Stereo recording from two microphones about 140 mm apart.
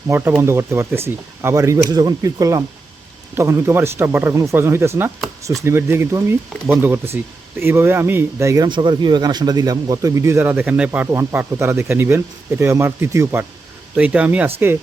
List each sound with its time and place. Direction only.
0.1 s speech: 20° right (ahead or behind)
8.6 s speech: 35° right (ahead or behind); by 14.5 s 10° right (ahead or behind)